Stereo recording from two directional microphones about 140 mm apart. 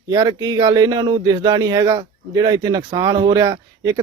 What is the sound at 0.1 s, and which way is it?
A man's voice, 25° right (ahead or behind).